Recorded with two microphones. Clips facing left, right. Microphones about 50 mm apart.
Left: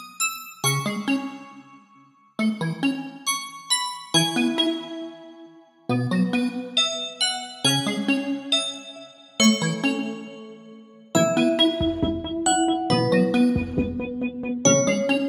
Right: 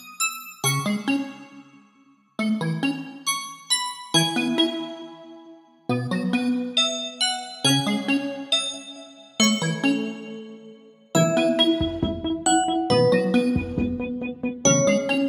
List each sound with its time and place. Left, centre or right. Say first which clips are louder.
0.2 s music: even; centre
2.3 s music: even; centre
5.9 s music: left 1 dB; centre
8.2 s music: left 2 dB; centre
9.4 s music: left 1 dB; centre
11.1 s music: even; centre